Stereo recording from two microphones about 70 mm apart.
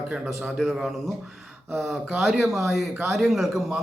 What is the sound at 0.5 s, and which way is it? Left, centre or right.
A man's voice, centre.